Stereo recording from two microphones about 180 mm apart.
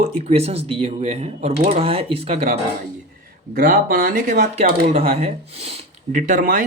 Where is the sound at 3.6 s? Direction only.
55° right (ahead or behind).